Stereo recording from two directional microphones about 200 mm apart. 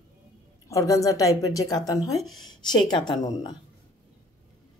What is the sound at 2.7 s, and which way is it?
Speech, 20° left (ahead or behind).